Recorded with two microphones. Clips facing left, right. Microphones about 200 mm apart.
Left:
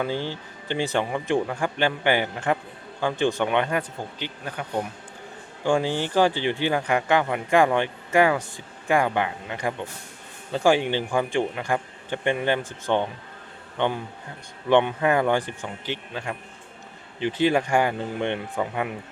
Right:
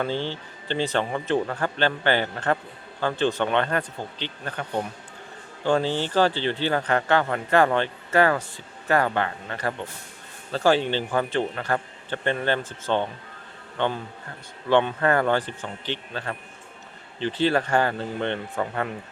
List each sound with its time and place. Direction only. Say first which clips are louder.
0.0 s speech: even; 10° left (ahead or behind)